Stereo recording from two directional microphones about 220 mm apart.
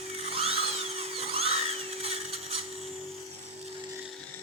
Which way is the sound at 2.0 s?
25° right (ahead or behind).